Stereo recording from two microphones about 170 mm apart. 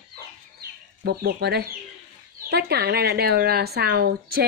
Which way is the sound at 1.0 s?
70° right (ahead or behind).